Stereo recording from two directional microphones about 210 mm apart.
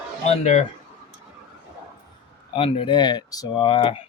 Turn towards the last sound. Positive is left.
turn(degrees=25)  # may be behind; listen again after turning